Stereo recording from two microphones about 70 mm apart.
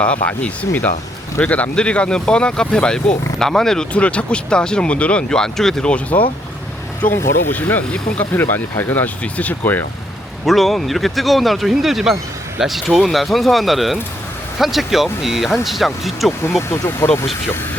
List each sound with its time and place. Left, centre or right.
0.0 s speech: centre
3.9 s speech: centre
6.1 s speech: left
7.1 s speech: left
7.5 s speech: left
10.4 s speech: centre
16.6 s speech: left